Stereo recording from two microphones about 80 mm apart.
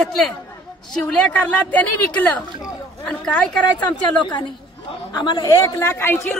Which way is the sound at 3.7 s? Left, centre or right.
Left.